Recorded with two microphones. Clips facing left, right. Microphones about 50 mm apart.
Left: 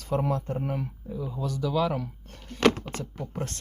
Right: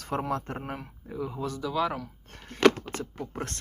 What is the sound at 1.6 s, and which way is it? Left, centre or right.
Speech, right.